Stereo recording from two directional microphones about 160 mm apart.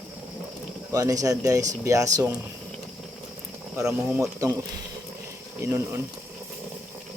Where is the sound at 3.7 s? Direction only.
15° right (ahead or behind).